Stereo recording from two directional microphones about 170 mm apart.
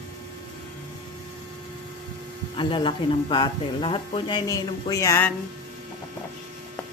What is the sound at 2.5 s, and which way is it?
Speech, 30° left (ahead or behind).